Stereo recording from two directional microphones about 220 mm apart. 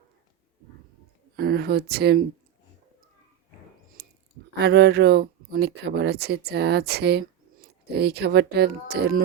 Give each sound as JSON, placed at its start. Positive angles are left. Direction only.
{"t": 1.4, "sound": "speech", "side_deg": -45}
{"t": 4.0, "sound": "a sound", "side_deg": -45}
{"t": 4.6, "sound": "speech", "side_deg": -45}